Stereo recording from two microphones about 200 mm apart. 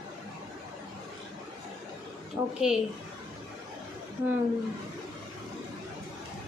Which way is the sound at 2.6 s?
5° right (ahead or behind).